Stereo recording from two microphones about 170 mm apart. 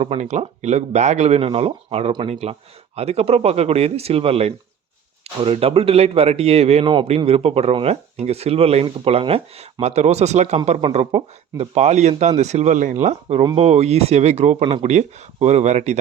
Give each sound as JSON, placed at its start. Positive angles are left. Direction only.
{"t": 0.0, "sound": "a man's voice", "side_deg": -40}